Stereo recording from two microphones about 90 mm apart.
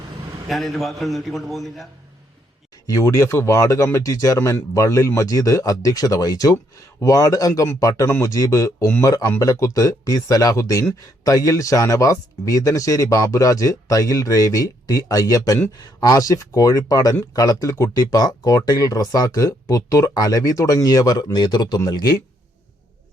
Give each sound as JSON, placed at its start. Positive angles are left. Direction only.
{"t": 0.4, "sound": "a man's voice", "side_deg": 0}
{"t": 2.8, "sound": "speech", "side_deg": 35}